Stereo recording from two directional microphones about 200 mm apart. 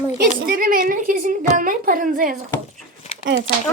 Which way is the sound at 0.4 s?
45° right (ahead or behind).